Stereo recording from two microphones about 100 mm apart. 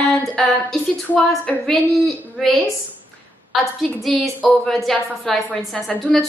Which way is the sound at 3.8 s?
Centre (ahead or behind).